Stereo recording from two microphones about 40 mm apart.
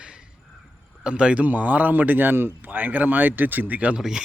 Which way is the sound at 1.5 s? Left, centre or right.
Right.